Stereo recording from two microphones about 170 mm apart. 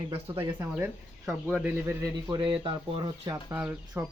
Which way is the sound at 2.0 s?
25° right (ahead or behind).